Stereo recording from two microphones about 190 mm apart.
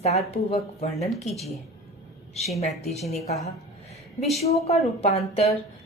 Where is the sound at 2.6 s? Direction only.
35° left (ahead or behind).